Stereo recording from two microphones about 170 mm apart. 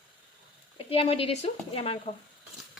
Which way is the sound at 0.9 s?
35° left (ahead or behind).